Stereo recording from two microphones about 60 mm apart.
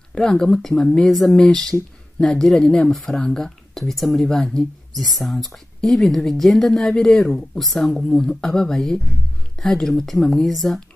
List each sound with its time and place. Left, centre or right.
0.1 s speech: centre
1.3 s speech: centre
2.9 s speech: centre